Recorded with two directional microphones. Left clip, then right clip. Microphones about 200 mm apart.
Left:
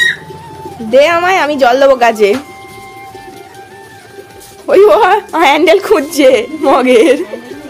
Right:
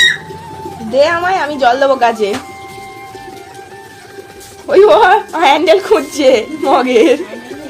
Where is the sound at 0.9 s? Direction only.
40° left (ahead or behind).